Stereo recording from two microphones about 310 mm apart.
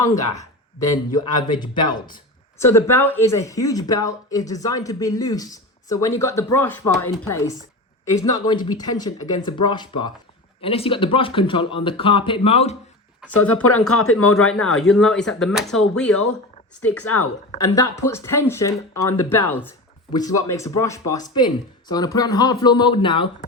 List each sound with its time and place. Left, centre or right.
0.0 s speech: centre
13.4 s speech: left
14.6 s speech: centre
16.9 s speech: left
17.6 s speech: centre
20.1 s speech: centre